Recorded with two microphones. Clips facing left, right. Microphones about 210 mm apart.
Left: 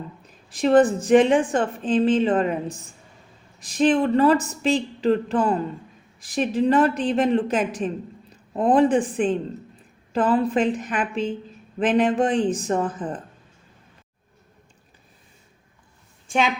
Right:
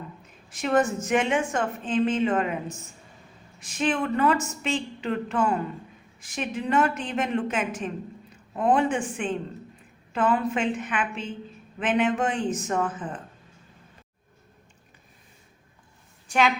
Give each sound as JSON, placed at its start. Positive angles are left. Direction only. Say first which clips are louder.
{"t": 0.5, "sound": "a woman's voice", "louder": "left 7 dB", "side_deg": 35}